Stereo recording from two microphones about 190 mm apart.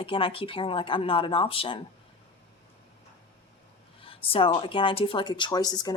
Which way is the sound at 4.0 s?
30° left (ahead or behind).